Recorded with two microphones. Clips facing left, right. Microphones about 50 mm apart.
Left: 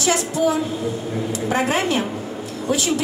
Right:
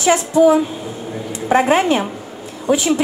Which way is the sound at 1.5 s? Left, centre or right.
Right.